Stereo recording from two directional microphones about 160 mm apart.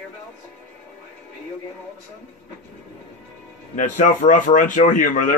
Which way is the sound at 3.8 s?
55° left (ahead or behind).